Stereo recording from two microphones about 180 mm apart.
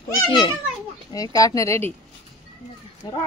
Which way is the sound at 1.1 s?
20° left (ahead or behind).